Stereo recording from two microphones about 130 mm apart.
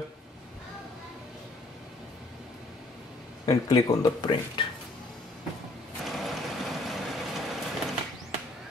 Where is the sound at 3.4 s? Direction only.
25° left (ahead or behind).